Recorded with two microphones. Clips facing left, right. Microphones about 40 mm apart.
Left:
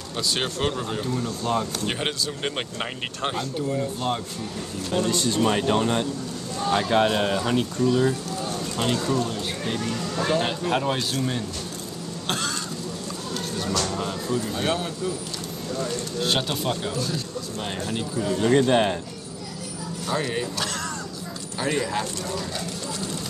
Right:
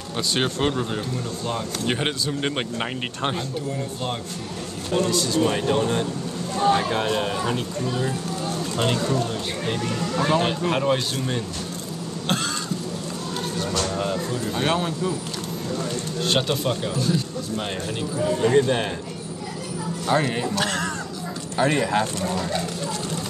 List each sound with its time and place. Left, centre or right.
0.3 s speech: centre
5.1 s speech: left
5.4 s speech: centre
8.7 s speech: centre
12.3 s cough: centre
13.6 s music: centre
14.6 s speech: right
16.2 s speech: centre
18.5 s speech: centre
20.1 s speech: right
20.6 s speech: right